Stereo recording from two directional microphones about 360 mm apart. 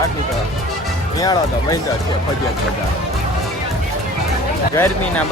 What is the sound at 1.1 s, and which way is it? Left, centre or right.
Speech, centre.